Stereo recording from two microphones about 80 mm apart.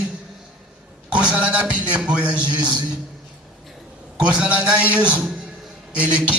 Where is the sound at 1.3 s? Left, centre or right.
Centre.